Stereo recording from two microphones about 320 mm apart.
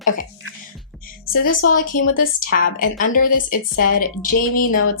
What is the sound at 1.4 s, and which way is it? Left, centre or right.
Speech, left.